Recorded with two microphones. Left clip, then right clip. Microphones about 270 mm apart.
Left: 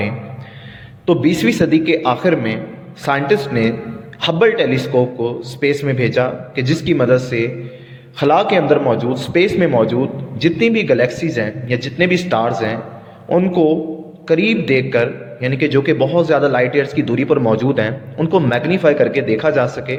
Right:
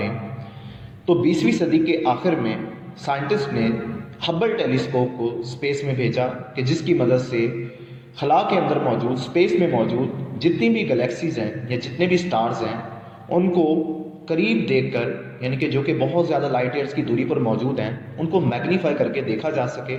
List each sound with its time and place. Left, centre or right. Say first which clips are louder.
1.0 s a man's voice: left 4 dB; left